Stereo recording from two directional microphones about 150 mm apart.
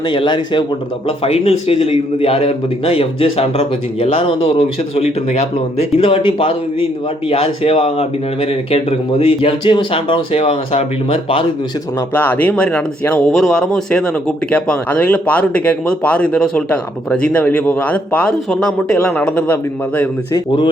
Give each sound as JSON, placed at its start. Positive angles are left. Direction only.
{"t": 0.0, "sound": "speech", "side_deg": 30}
{"t": 12.1, "sound": "speech", "side_deg": 10}